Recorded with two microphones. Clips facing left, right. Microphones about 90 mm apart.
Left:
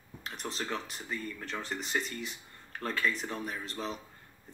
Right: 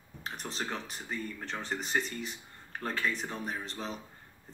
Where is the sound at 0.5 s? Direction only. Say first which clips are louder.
Left 2 dB; 35° right (ahead or behind).